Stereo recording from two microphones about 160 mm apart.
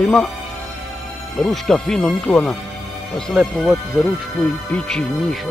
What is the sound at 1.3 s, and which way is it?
Speech, centre (ahead or behind).